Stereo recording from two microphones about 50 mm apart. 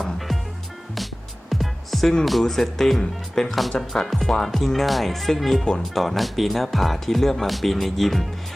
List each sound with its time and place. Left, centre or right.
1.5 s music: centre
2.4 s speech: centre
5.6 s speech: centre
6.0 s speech: centre